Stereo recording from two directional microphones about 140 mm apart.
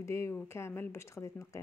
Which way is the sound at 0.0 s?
20° left (ahead or behind).